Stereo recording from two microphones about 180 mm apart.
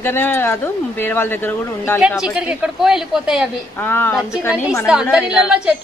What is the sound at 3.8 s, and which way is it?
Speech, 10° left (ahead or behind).